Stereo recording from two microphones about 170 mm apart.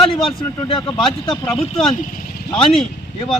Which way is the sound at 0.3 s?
30° left (ahead or behind).